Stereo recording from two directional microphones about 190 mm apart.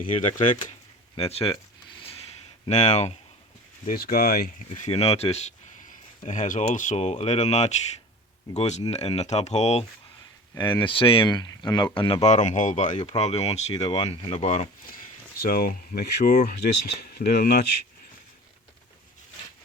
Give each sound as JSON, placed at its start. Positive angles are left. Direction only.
{"t": 0.0, "sound": "speech", "side_deg": 40}
{"t": 2.6, "sound": "speech", "side_deg": 35}
{"t": 3.8, "sound": "speech", "side_deg": 50}
{"t": 4.8, "sound": "speech", "side_deg": 35}
{"t": 10.5, "sound": "speech", "side_deg": 10}
{"t": 10.8, "sound": "speech", "side_deg": 30}
{"t": 15.4, "sound": "speech", "side_deg": 50}